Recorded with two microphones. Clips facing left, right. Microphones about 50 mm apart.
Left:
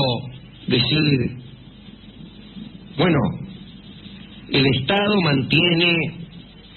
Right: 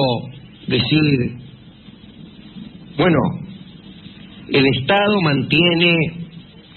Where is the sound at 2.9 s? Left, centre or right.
Centre.